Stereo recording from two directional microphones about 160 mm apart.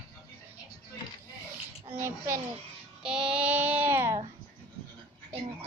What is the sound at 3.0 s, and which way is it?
Child singing, 5° right (ahead or behind).